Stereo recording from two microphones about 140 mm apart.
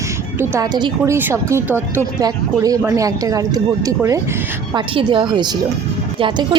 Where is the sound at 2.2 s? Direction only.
25° right (ahead or behind).